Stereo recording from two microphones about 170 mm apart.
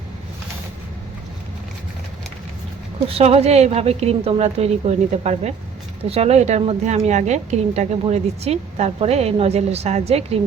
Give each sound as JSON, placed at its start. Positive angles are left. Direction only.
{"t": 3.1, "sound": "a woman's voice", "side_deg": -35}